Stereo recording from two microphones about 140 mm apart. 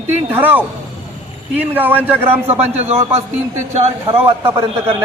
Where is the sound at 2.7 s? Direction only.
50° right (ahead or behind).